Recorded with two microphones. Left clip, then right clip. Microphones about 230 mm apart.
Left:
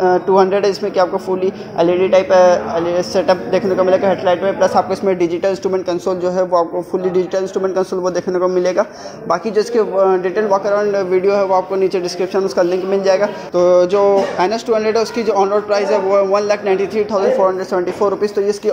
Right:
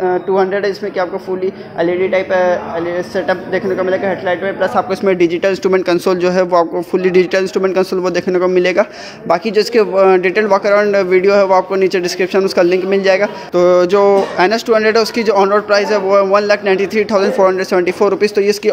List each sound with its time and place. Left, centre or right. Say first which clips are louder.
0.0 s a man's voice: left 2 dB; centre
5.0 s a man's voice: right 3 dB; right